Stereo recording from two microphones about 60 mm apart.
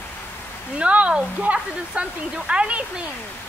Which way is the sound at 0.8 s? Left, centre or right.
Right.